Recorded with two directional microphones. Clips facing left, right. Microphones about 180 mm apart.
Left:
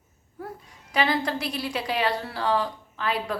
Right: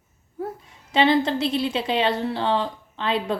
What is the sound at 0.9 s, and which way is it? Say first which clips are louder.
A woman's voice: right 6 dB; 25° right (ahead or behind).